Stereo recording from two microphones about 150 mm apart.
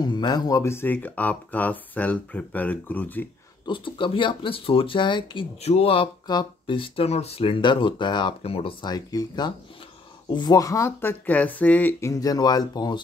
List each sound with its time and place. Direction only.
0.0 s speech: 30° left (ahead or behind); by 3.3 s 10° left (ahead or behind)
3.6 s speech: 35° left (ahead or behind)